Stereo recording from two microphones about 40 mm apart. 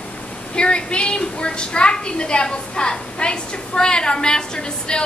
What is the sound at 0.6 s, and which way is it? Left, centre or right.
A woman's voice, left.